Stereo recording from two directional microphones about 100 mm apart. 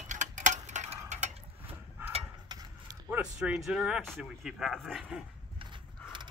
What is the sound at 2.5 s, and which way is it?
Mechanisms, 40° right (ahead or behind).